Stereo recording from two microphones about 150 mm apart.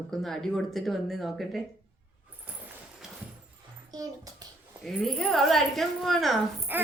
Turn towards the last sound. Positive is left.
turn(degrees=-15)  # may be behind; listen again after turning